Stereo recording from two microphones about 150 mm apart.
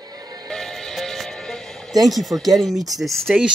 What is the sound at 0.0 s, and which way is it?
Music, 25° right (ahead or behind).